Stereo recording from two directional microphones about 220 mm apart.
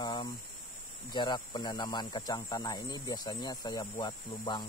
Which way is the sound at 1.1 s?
20° left (ahead or behind).